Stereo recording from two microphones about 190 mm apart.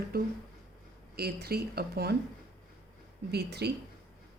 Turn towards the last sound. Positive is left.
turn(degrees=-60)  # may be behind; listen again after turning